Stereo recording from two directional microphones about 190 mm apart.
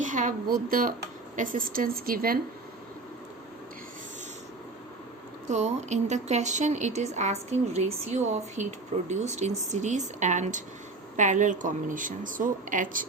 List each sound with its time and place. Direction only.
0.0 s a woman's voice: 45° right (ahead or behind)
5.5 s a woman's voice: 35° right (ahead or behind)